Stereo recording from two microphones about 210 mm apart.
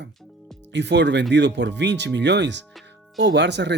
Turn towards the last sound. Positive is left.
turn(degrees=-55)  # may be behind; listen again after turning